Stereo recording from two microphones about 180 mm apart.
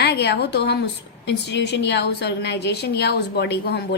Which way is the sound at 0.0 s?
70° left (ahead or behind).